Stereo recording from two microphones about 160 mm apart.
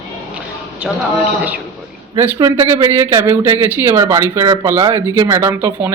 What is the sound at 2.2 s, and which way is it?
Speech, 20° right (ahead or behind).